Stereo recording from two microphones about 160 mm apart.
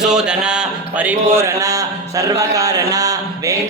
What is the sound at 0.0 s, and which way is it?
Music, 5° right (ahead or behind).